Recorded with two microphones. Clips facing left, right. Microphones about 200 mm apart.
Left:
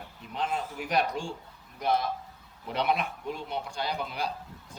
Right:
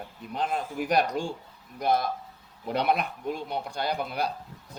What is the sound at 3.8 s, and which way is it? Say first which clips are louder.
Speech: right 5 dB; 55° right (ahead or behind).